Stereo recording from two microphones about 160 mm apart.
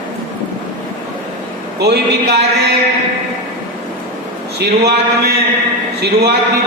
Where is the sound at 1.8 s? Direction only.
90° right.